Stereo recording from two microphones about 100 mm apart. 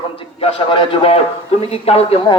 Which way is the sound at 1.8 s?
80° left.